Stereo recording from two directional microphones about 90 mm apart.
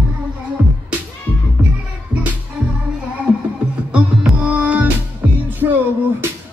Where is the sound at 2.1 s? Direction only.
15° right (ahead or behind).